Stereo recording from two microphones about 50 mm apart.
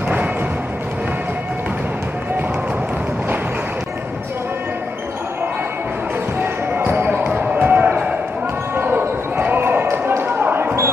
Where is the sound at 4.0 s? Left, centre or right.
Right.